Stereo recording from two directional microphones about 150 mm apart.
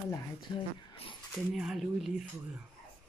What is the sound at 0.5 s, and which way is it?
Speech, 35° left (ahead or behind).